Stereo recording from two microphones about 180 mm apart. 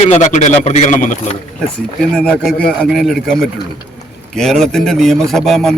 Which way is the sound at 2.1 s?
5° left (ahead or behind).